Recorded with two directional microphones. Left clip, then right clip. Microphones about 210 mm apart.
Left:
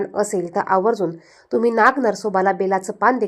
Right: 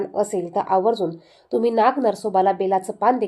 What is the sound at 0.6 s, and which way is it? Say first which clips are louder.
Speech: left 1 dB; 50° left (ahead or behind).